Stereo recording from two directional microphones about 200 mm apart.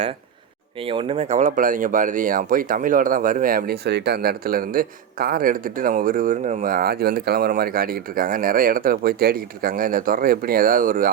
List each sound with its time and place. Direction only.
0.9 s speech: 25° right (ahead or behind); by 11.1 s 45° right (ahead or behind)